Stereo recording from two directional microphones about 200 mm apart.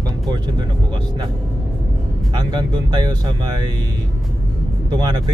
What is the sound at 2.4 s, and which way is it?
Speech, 20° right (ahead or behind).